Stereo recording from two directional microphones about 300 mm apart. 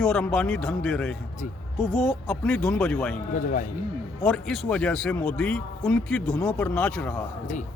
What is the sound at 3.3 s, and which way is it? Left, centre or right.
Speech, left.